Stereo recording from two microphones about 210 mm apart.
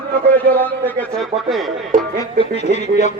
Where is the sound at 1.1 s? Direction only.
Centre (ahead or behind).